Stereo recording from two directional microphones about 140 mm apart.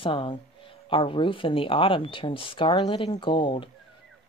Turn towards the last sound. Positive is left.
turn(degrees=35)  # may be behind; listen again after turning